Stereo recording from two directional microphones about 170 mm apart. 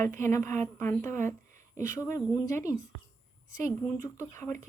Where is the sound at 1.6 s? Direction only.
45° right (ahead or behind).